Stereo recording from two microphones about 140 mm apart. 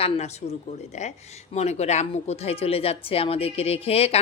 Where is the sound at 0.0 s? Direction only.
50° left (ahead or behind).